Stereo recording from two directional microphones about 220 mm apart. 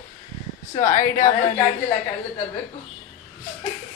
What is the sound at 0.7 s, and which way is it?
Speech, 35° left (ahead or behind).